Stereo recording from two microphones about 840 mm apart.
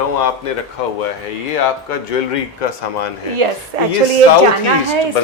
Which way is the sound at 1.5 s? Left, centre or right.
Left.